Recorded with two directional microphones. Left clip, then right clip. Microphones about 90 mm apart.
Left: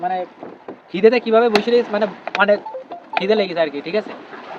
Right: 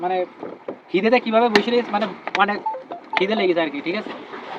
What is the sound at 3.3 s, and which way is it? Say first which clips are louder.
Speech: left 6 dB; 75° left (ahead or behind).